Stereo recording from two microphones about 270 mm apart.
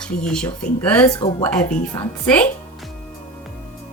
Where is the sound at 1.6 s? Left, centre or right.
Centre.